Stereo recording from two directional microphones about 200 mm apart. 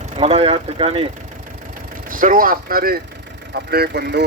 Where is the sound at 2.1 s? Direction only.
45° right (ahead or behind).